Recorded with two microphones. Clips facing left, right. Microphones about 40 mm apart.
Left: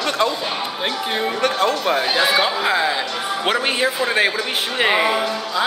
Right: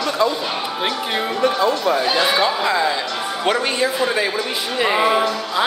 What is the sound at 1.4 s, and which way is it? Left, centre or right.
Speech, left.